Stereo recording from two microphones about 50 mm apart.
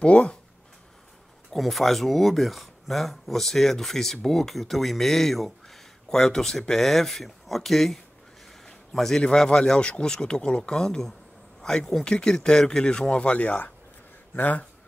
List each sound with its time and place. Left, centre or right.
0.0 s speech: left
1.5 s speech: centre
9.2 s speech: centre
14.3 s speech: left